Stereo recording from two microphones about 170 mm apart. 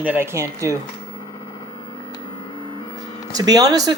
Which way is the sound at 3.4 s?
20° right (ahead or behind).